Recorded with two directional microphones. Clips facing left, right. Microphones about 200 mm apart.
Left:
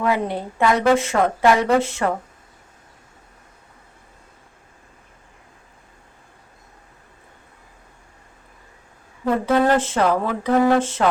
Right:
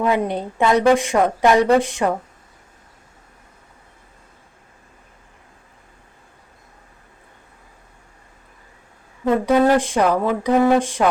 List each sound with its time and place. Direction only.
0.0 s a woman's voice: 20° right (ahead or behind)
9.2 s a woman's voice: 15° right (ahead or behind)